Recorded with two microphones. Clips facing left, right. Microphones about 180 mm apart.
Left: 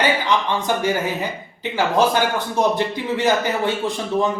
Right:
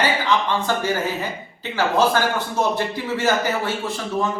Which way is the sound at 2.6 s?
20° left (ahead or behind).